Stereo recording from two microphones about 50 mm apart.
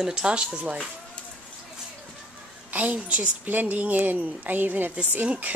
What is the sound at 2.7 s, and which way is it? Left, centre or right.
A woman's voice, right.